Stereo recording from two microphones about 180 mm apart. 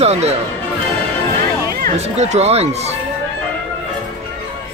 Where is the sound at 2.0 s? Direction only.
40° right (ahead or behind).